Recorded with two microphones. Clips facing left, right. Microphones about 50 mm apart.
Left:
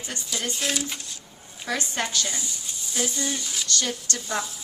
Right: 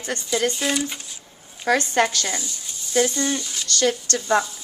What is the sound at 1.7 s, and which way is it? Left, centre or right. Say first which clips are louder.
Speech: right 9 dB; right.